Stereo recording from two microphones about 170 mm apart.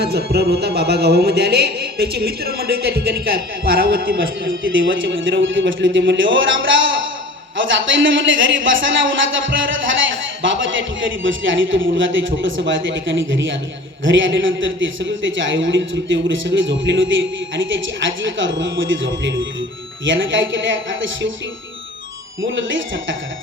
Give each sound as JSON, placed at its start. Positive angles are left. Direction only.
{"t": 0.0, "sound": "speech", "side_deg": -70}
{"t": 4.8, "sound": "speech", "side_deg": -90}
{"t": 22.4, "sound": "speech", "side_deg": -90}